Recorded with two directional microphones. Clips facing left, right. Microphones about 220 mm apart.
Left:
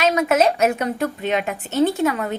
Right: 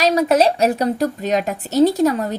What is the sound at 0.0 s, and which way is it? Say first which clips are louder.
A woman's voice: right 2 dB; 35° right (ahead or behind).